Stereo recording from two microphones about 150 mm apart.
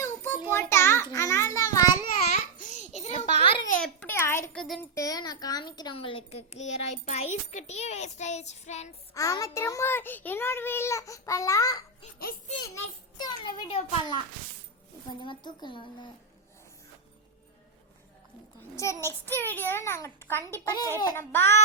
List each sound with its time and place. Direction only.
0.0 s child singing: 15° left (ahead or behind)
0.5 s a sound: 15° left (ahead or behind)
2.2 s babbling: 55° left (ahead or behind)
3.0 s a sound: 45° left (ahead or behind)
3.8 s a sound: 10° left (ahead or behind)
4.5 s child singing: centre (ahead or behind)
4.8 s a woman's voice: 20° left (ahead or behind); by 8.9 s 50° left (ahead or behind)
9.1 s a child's voice: 20° left (ahead or behind)
9.6 s child singing: 20° left (ahead or behind)
13.2 s speech: 30° left (ahead or behind)
15.2 s speech: 30° left (ahead or behind)
18.8 s child singing: 20° left (ahead or behind)
20.5 s a child's voice: 20° left (ahead or behind)
21.2 s child singing: 15° left (ahead or behind)